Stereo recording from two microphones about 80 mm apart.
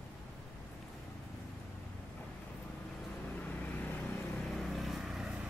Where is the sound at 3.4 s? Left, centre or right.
Left.